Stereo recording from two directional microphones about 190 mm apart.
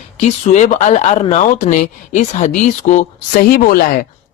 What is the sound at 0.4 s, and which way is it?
A man's voice, 40° left (ahead or behind).